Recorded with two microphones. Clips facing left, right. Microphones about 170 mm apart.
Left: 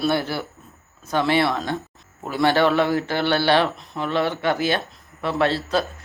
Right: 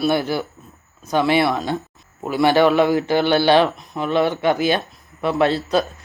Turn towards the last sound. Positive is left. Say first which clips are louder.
# right 3 dB
turn(degrees=-15)  # may be behind; listen again after turning